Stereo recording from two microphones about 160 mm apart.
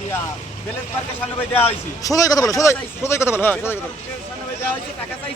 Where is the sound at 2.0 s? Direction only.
20° left (ahead or behind).